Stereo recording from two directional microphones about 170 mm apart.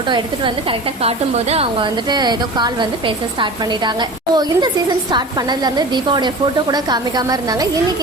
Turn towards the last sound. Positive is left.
turn(degrees=-20)  # may be behind; listen again after turning